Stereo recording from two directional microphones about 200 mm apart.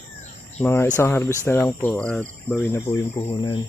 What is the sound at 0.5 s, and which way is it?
Speech, 10° left (ahead or behind).